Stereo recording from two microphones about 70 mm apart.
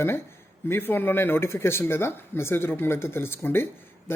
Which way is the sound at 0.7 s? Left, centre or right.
Left.